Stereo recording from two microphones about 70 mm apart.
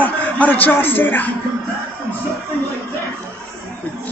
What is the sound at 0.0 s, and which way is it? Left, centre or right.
A man's voice, left.